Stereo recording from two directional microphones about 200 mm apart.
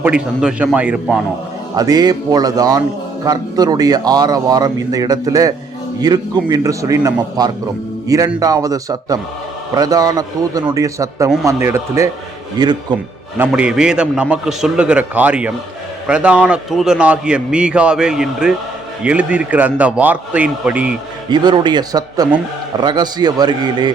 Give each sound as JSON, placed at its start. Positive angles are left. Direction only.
{"t": 0.0, "sound": "a man's voice", "side_deg": -5}
{"t": 1.7, "sound": "a man's voice", "side_deg": -20}
{"t": 13.4, "sound": "a man's voice", "side_deg": -5}
{"t": 21.2, "sound": "a man's voice", "side_deg": -20}